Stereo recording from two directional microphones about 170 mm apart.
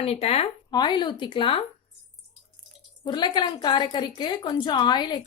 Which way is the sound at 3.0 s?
25° left (ahead or behind).